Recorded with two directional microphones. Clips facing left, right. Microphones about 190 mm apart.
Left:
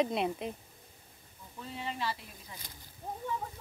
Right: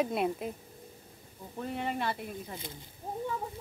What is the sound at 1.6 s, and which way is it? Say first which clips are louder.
Speech: right 4 dB; 55° right (ahead or behind).